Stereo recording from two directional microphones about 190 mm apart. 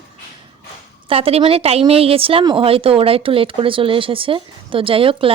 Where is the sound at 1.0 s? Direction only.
30° right (ahead or behind).